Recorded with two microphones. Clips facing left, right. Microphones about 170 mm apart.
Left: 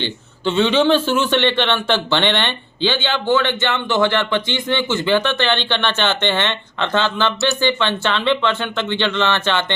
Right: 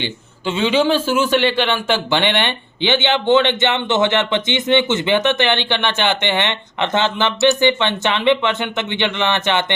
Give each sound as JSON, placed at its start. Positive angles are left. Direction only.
{"t": 0.0, "sound": "a man's voice", "side_deg": -10}